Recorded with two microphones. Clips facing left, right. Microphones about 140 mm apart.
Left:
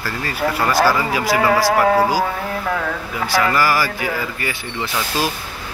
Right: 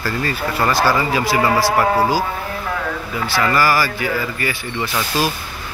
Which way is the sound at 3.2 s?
15° left (ahead or behind).